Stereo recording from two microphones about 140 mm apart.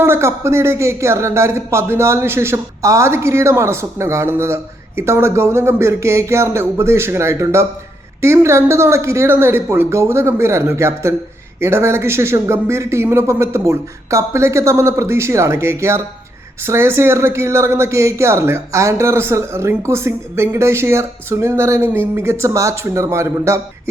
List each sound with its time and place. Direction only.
0.0 s speech: 20° right (ahead or behind)